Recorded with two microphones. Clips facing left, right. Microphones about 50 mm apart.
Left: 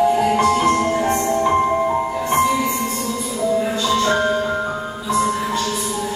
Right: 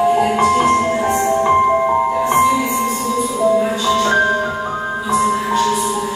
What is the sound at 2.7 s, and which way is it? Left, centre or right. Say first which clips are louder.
Music: right 4 dB; right.